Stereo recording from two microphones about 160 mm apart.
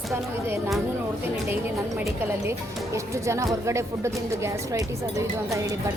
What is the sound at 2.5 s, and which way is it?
Speech, 20° right (ahead or behind).